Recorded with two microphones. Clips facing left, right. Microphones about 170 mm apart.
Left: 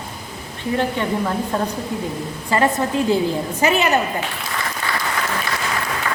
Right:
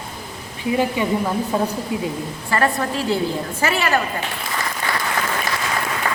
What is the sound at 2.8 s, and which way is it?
A woman's voice, 20° left (ahead or behind).